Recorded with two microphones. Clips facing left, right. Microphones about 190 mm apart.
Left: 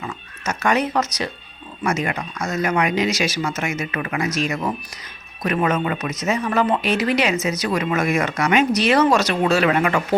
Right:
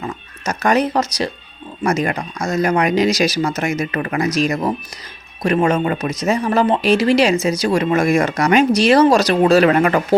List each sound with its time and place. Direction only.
0.0 s speech: 35° right (ahead or behind)